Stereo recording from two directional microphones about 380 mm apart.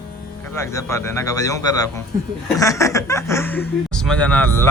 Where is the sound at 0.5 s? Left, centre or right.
Centre.